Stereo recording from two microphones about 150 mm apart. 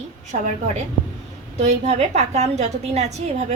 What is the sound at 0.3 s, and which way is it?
Speech, 50° right (ahead or behind).